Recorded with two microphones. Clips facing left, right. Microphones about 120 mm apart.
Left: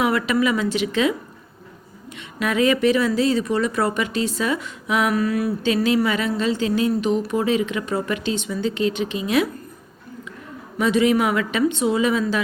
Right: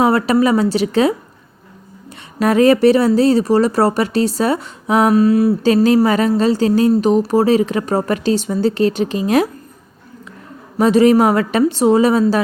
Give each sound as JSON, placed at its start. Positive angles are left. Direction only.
{"t": 0.0, "sound": "speech", "side_deg": -35}
{"t": 2.1, "sound": "a sound", "side_deg": -35}
{"t": 2.8, "sound": "speech", "side_deg": -35}
{"t": 10.8, "sound": "speech", "side_deg": -40}